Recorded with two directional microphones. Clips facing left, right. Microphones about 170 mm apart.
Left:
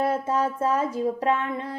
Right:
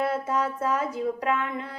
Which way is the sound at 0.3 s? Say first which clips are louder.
Left 2 dB; 30° left (ahead or behind).